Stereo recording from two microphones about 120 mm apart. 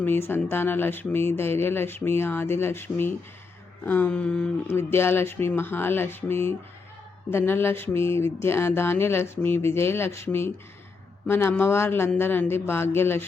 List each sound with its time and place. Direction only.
0.0 s speech: 20° left (ahead or behind)
3.8 s a sound: 15° left (ahead or behind)
4.7 s speech: 20° left (ahead or behind)